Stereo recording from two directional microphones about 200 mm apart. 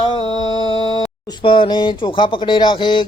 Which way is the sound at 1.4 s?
25° left (ahead or behind).